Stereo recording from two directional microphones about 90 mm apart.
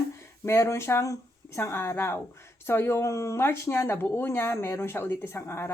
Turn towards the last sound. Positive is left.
turn(degrees=30)  # may be behind; listen again after turning